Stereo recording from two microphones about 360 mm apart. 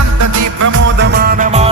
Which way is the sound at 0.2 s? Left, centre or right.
Right.